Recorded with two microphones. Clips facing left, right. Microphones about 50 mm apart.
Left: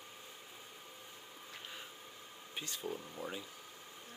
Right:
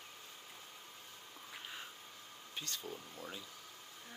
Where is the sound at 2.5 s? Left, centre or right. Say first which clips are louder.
Left 3 dB; centre.